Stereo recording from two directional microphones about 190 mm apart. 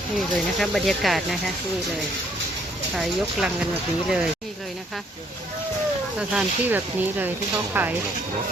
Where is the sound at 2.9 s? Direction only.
Centre (ahead or behind).